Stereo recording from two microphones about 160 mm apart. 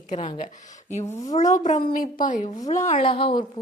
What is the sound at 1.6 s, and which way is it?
Speech, 55° left (ahead or behind).